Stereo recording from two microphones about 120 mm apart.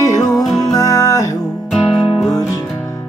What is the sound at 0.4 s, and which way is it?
Music, centre (ahead or behind).